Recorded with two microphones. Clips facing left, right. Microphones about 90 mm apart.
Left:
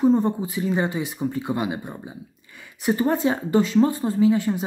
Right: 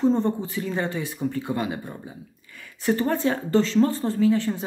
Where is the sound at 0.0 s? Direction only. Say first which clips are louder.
Left 2 dB; 10° left (ahead or behind).